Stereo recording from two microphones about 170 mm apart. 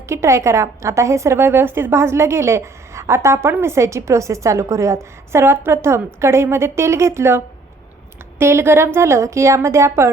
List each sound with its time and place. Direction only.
0.1 s a woman's voice: 15° right (ahead or behind)